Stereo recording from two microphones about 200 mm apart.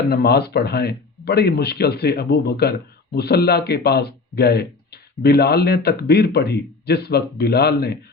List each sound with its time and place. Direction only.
0.1 s speech: 50° left (ahead or behind)